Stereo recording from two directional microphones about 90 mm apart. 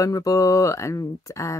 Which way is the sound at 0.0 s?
40° left (ahead or behind).